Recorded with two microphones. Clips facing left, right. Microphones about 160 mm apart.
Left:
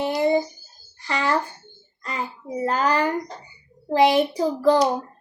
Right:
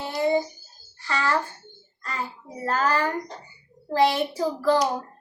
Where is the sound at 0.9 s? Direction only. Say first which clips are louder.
Left 2 dB; 15° left (ahead or behind).